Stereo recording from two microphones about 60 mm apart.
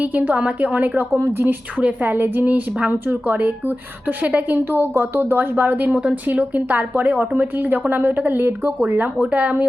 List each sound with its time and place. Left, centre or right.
0.0 s a woman's voice: right
1.2 s speech: right
1.7 s a woman's voice: right
2.0 s a woman's voice: right
8.8 s a woman's voice: right